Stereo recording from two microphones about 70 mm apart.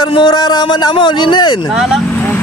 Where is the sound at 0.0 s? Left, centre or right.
Left.